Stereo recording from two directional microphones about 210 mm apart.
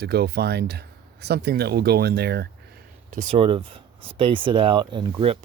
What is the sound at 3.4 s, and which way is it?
Speech, 25° right (ahead or behind).